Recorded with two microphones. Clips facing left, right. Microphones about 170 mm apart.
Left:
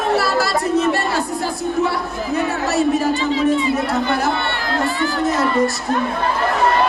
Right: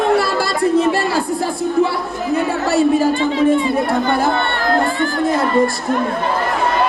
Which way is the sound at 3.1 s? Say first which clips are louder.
Right 3 dB; 55° right (ahead or behind).